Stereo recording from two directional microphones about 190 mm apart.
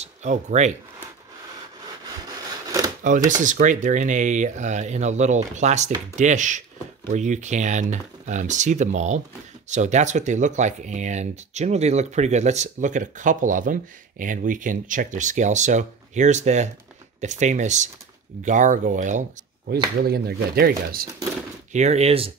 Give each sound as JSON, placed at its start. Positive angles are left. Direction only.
{"t": 0.0, "sound": "speech", "side_deg": -40}
{"t": 3.3, "sound": "speech", "side_deg": -40}
{"t": 20.1, "sound": "speech", "side_deg": -55}
{"t": 21.7, "sound": "speech", "side_deg": -35}